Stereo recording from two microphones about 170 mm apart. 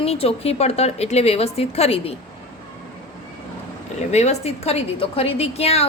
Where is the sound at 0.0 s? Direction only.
35° left (ahead or behind).